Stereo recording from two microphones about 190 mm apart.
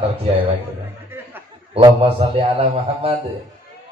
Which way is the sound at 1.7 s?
30° right (ahead or behind).